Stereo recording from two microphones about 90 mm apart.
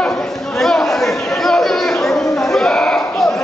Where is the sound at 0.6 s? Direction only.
5° left (ahead or behind).